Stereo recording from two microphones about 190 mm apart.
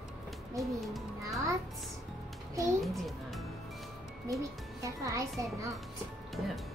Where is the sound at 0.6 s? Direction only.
Centre (ahead or behind).